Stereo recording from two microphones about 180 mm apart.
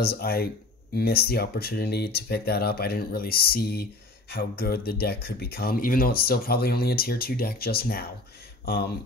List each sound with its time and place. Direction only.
0.0 s speech: 60° left (ahead or behind)